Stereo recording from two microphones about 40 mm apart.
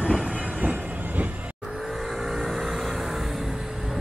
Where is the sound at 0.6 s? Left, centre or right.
Right.